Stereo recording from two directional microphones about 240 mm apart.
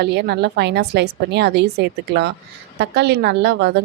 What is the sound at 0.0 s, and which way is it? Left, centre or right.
Speech, right.